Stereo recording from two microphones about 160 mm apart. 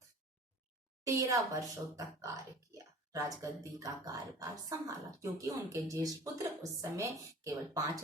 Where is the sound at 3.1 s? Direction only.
20° right (ahead or behind).